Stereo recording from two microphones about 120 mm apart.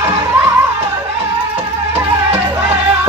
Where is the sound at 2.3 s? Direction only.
15° right (ahead or behind).